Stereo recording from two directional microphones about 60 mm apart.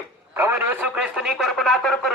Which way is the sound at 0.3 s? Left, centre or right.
Right.